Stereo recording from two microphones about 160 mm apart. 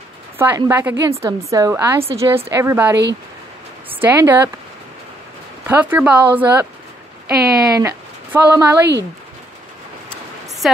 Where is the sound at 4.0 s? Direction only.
10° right (ahead or behind).